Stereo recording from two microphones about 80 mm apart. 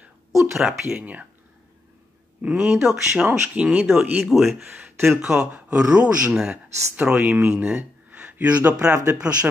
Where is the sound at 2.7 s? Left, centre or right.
Centre.